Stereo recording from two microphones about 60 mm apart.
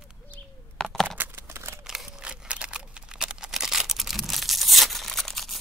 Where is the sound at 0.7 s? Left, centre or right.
Centre.